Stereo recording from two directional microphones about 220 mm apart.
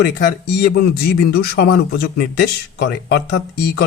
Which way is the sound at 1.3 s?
45° left (ahead or behind).